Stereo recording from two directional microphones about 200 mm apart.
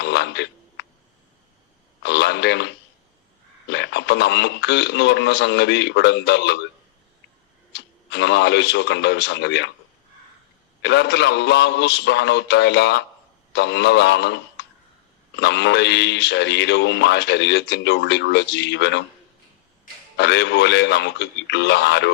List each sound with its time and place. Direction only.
0.0 s a sound: 60° left (ahead or behind)
2.0 s radio: 60° left (ahead or behind)
3.7 s speech: 60° left (ahead or behind)
7.7 s speech: 60° left (ahead or behind)
10.8 s speech: 60° left (ahead or behind)
20.1 s speech: 60° left (ahead or behind)